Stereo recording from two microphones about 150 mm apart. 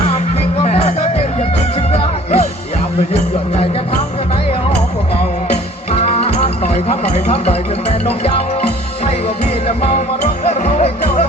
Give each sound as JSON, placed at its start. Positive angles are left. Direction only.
{"t": 0.6, "sound": "music", "side_deg": 45}
{"t": 6.0, "sound": "music", "side_deg": 40}
{"t": 9.6, "sound": "music", "side_deg": 45}